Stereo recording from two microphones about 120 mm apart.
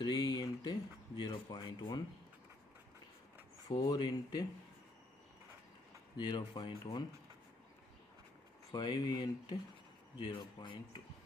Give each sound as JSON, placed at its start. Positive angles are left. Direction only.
{"t": 0.0, "sound": "speech", "side_deg": 35}
{"t": 3.6, "sound": "speech", "side_deg": 35}
{"t": 6.1, "sound": "speech", "side_deg": 40}
{"t": 8.7, "sound": "speech", "side_deg": 35}